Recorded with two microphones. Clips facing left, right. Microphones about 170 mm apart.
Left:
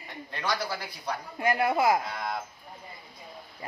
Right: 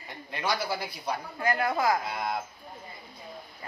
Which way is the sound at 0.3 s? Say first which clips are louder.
Right 1 dB; 10° right (ahead or behind).